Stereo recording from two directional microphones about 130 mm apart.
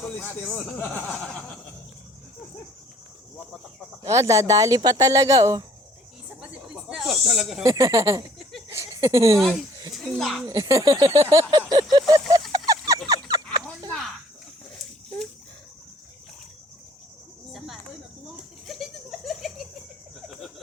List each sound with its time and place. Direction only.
0.2 s speech: 5° left (ahead or behind)
4.0 s speech: 25° right (ahead or behind)
6.4 s snake: 5° right (ahead or behind)
7.6 s speech: 25° right (ahead or behind)
8.7 s a sound: 25° right (ahead or behind)
9.0 s speech: 25° right (ahead or behind)
9.9 s a child's voice: centre (ahead or behind)
10.4 s speech: 25° right (ahead or behind)
11.7 s a sound: 35° right (ahead or behind)
18.7 s a sound: centre (ahead or behind)